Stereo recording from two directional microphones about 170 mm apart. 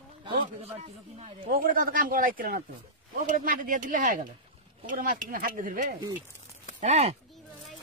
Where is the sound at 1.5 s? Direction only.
60° right (ahead or behind).